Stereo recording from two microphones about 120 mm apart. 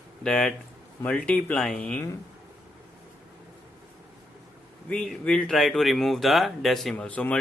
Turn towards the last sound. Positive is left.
turn(degrees=10)  # may be behind; listen again after turning